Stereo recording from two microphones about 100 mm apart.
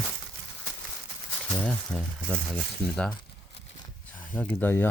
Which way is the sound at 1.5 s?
5° left (ahead or behind).